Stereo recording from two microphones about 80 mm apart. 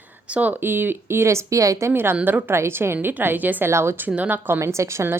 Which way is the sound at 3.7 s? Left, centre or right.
Right.